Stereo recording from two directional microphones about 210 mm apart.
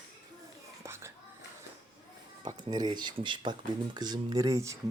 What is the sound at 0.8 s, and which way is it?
Whispering, 10° right (ahead or behind).